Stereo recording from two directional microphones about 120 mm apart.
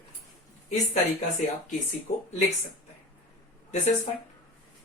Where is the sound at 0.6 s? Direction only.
70° left (ahead or behind).